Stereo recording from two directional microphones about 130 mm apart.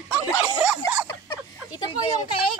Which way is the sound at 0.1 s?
10° right (ahead or behind).